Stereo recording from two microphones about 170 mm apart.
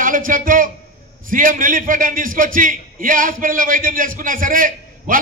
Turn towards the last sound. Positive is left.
turn(degrees=-55)  # may be behind; listen again after turning